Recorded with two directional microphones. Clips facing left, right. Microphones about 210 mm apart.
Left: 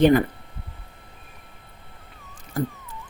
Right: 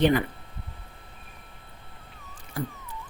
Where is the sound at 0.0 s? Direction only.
45° left (ahead or behind).